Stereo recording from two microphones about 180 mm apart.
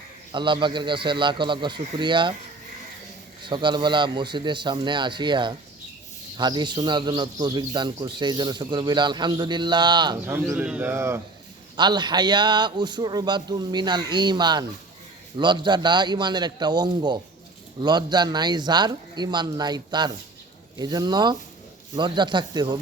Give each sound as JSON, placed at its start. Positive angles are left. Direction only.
{"t": 0.3, "sound": "a man's voice", "side_deg": -25}
{"t": 3.4, "sound": "a man's voice", "side_deg": -25}
{"t": 10.2, "sound": "speech", "side_deg": -15}
{"t": 11.8, "sound": "a man's voice", "side_deg": -25}